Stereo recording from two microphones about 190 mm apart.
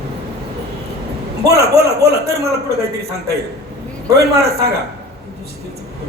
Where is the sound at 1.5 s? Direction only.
55° right (ahead or behind).